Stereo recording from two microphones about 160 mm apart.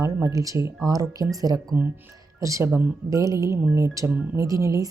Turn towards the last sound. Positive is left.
turn(degrees=-20)  # may be behind; listen again after turning